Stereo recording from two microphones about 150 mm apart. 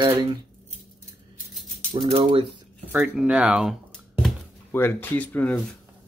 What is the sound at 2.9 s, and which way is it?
Speech, 10° right (ahead or behind).